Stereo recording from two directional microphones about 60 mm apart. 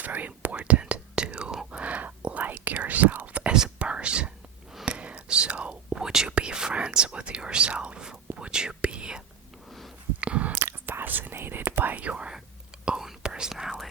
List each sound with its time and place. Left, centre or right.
0.0 s whispering: right
1.8 s whispering: right
10.2 s chewing: right
10.5 s whispering: right
11.9 s whispering: right